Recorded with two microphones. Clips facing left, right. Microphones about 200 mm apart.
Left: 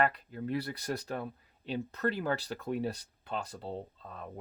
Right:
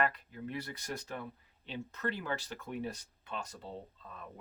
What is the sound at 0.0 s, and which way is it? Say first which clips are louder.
Speech: left 4 dB; 35° left (ahead or behind).